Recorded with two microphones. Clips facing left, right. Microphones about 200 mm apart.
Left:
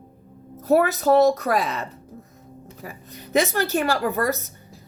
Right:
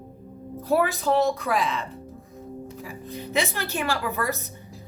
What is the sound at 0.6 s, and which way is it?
Music, 45° left (ahead or behind).